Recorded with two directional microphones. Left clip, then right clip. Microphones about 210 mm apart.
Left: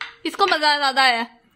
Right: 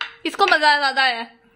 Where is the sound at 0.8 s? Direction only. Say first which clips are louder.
Left 1 dB; 20° left (ahead or behind).